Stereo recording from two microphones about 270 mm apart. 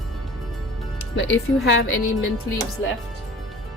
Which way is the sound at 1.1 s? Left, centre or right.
Left.